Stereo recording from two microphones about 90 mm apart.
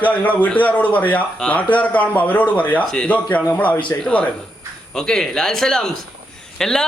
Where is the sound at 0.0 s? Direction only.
15° left (ahead or behind).